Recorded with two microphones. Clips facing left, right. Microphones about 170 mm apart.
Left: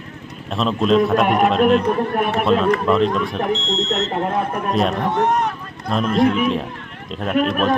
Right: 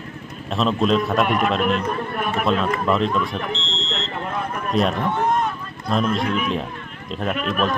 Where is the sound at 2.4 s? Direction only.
Centre (ahead or behind).